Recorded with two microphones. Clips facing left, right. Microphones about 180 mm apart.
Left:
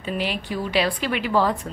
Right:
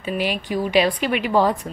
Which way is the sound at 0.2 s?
15° right (ahead or behind).